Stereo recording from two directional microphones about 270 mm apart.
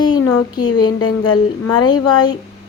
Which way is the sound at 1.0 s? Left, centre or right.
Left.